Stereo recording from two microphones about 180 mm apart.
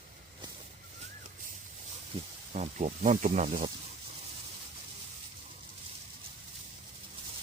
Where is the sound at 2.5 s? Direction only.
40° right (ahead or behind).